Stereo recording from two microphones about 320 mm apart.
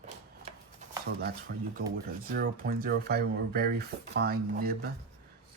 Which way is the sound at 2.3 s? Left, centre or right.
Right.